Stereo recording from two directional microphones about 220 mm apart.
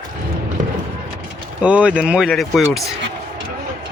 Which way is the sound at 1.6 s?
5° right (ahead or behind).